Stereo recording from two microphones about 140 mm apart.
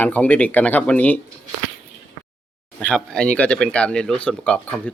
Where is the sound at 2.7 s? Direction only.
5° left (ahead or behind).